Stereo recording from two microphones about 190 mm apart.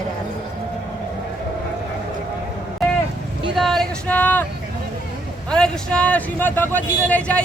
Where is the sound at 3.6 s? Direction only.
Centre (ahead or behind).